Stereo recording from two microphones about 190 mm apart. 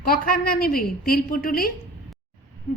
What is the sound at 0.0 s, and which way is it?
A woman's voice, 50° left (ahead or behind).